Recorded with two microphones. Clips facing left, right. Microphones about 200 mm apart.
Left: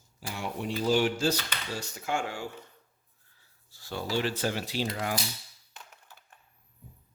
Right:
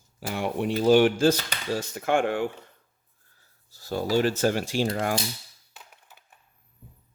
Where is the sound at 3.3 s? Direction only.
40° right (ahead or behind).